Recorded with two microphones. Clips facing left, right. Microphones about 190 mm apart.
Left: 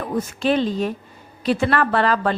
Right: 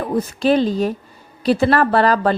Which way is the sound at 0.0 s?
35° right (ahead or behind).